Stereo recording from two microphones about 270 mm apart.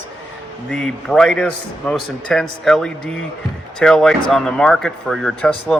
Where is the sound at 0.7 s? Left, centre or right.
Centre.